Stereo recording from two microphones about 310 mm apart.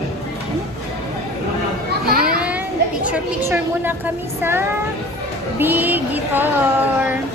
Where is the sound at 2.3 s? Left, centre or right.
Centre.